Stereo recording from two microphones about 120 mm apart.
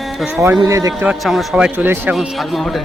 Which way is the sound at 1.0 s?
Centre (ahead or behind).